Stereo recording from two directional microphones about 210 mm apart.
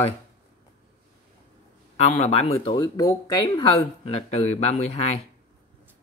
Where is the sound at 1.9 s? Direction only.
30° left (ahead or behind).